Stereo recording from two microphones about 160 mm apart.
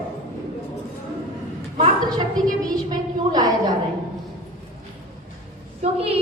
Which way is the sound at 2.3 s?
25° right (ahead or behind).